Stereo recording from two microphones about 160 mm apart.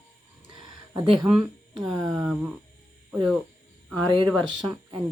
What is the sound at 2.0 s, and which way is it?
Speech, 20° right (ahead or behind).